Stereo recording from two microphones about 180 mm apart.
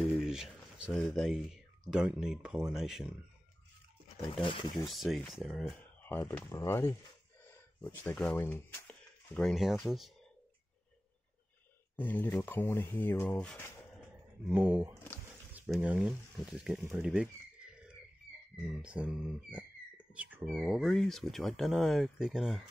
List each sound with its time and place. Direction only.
0.2 s a sound: 5° right (ahead or behind)
1.1 s speech: centre (ahead or behind)
4.2 s speech: 30° left (ahead or behind)
4.8 s speech: centre (ahead or behind)
12.0 s speech: 10° left (ahead or behind)
14.5 s speech: 10° right (ahead or behind)
18.8 s speech: 5° right (ahead or behind)